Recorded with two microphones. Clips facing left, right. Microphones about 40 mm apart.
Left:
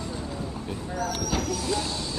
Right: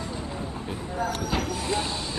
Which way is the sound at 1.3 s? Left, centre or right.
Right.